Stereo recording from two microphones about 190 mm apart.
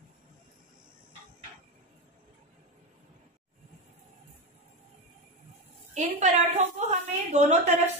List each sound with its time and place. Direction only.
5.9 s a woman's voice: 40° right (ahead or behind)